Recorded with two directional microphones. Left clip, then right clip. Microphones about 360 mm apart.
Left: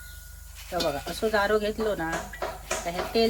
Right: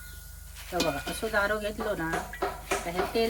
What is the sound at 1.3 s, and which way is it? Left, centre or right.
Speech, left.